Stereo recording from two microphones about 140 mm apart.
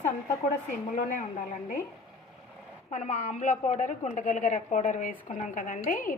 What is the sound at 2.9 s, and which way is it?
A woman's voice, 60° left (ahead or behind).